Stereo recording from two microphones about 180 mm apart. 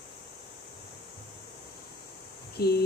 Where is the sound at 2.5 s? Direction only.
60° left (ahead or behind).